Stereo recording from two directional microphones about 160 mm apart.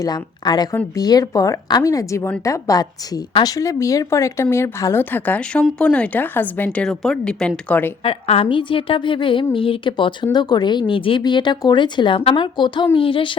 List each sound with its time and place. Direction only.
0.0 s a woman's voice: 25° left (ahead or behind); by 7.9 s 10° left (ahead or behind)
8.0 s a woman's voice: 35° left (ahead or behind)